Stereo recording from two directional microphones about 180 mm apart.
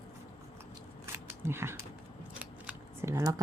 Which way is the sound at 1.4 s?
15° right (ahead or behind).